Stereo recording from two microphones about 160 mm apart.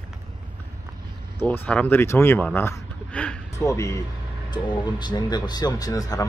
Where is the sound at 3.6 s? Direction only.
20° left (ahead or behind).